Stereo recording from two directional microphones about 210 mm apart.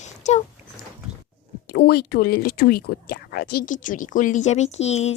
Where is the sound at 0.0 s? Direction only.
35° left (ahead or behind).